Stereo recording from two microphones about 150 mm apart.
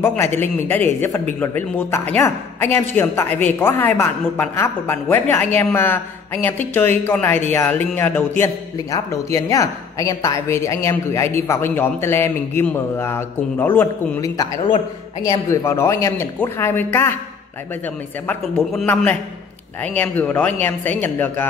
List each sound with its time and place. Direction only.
0.0 s a man's voice: 15° left (ahead or behind)
14.2 s a man's voice: 25° left (ahead or behind)
18.6 s a man's voice: centre (ahead or behind)
20.0 s a man's voice: 10° left (ahead or behind)